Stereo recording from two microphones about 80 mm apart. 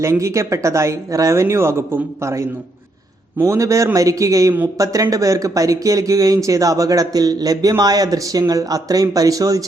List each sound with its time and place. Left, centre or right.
0.0 s speech: right